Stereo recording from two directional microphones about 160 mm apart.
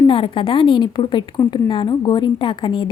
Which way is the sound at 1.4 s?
20° left (ahead or behind).